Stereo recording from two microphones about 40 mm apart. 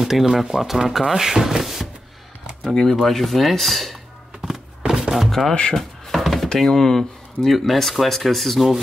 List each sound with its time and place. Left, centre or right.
0.0 s speech: centre
2.6 s speech: centre
4.8 s chopping: centre
5.5 s speech: left
5.8 s a sound: centre
6.6 s speech: centre